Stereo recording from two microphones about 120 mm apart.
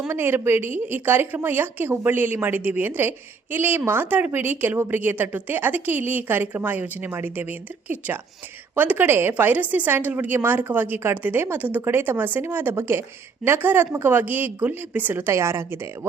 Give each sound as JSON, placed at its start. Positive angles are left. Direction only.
{"t": 0.1, "sound": "a woman's voice", "side_deg": -20}